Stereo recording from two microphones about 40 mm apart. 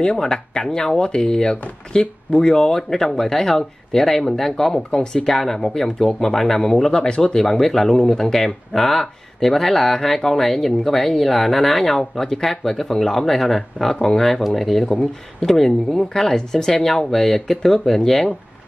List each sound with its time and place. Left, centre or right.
0.2 s speech: centre
5.3 s speech: centre
7.0 s speech: left